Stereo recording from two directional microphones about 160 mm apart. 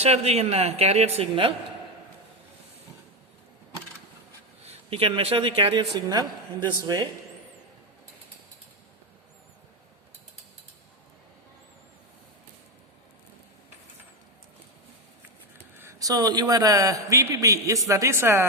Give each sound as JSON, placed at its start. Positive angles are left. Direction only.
{"t": 0.0, "sound": "speech", "side_deg": -40}
{"t": 4.6, "sound": "speech", "side_deg": -40}
{"t": 15.5, "sound": "a man's voice", "side_deg": -15}